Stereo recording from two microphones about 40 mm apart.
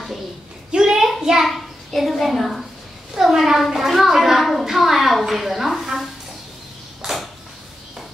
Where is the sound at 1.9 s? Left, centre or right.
Centre.